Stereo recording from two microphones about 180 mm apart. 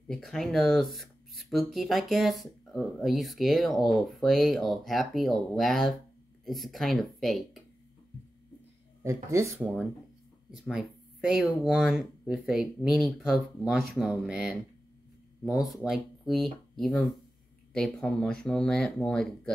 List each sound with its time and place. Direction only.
0.1 s speech: centre (ahead or behind)
9.0 s speech: 15° right (ahead or behind)
10.5 s speech: centre (ahead or behind)